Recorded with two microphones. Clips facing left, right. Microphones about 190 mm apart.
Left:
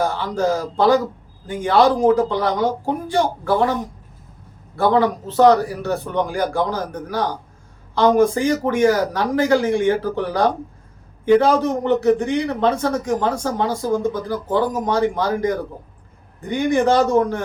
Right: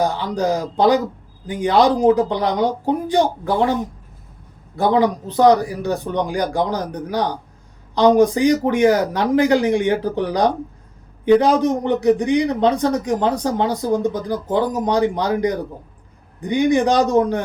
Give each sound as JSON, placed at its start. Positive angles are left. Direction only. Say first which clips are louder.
{"t": 0.0, "sound": "a man's voice", "louder": "right 1 dB", "side_deg": -15}
{"t": 4.8, "sound": "a man's voice", "louder": "even", "side_deg": -15}